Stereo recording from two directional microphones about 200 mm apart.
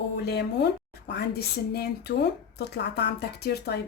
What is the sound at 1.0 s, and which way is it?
A woman's voice, 55° left (ahead or behind).